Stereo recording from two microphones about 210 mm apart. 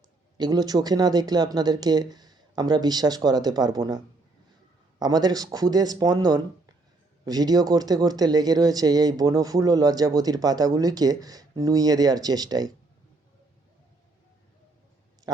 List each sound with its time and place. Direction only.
0.3 s speech: 20° right (ahead or behind)